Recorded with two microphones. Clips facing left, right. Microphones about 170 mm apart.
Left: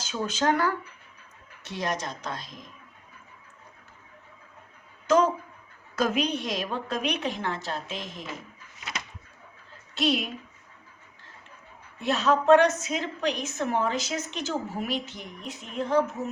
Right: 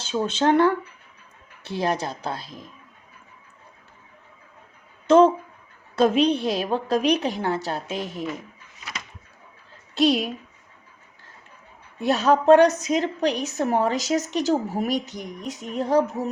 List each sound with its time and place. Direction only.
0.0 s speech: 30° right (ahead or behind)
1.8 s a woman's voice: 30° right (ahead or behind)
5.0 s a woman's voice: 30° right (ahead or behind)
9.9 s a woman's voice: 35° right (ahead or behind)
12.0 s a woman's voice: 40° right (ahead or behind)